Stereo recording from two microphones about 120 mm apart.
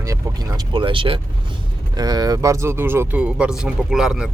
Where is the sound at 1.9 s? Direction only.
35° right (ahead or behind).